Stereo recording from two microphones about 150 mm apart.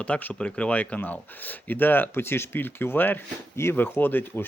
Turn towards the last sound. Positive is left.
turn(degrees=15)  # may be behind; listen again after turning